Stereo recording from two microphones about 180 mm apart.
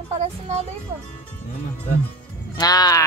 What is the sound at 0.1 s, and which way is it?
Speech, 35° right (ahead or behind).